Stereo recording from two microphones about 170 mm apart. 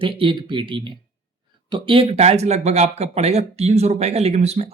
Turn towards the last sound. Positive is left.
turn(degrees=-40)  # may be behind; listen again after turning